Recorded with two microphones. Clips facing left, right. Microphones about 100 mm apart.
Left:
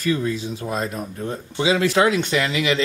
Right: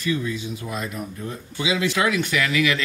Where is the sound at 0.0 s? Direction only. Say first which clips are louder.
Left 3 dB; 40° left (ahead or behind).